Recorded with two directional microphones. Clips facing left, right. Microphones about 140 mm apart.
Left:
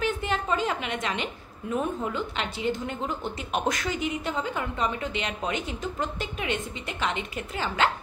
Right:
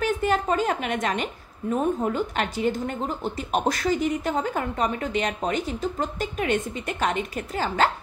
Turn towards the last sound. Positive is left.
turn(degrees=-40)  # may be behind; listen again after turning